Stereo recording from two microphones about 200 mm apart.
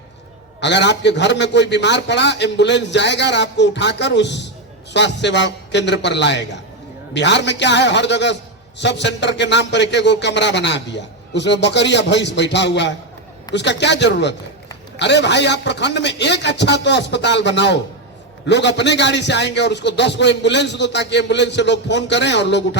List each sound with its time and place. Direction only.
0.6 s a man's voice: 60° left (ahead or behind)